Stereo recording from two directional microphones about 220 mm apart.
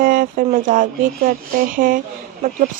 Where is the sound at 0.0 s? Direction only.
40° right (ahead or behind).